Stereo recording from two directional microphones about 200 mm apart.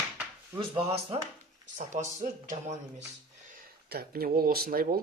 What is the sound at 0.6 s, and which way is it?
Speech, 30° right (ahead or behind).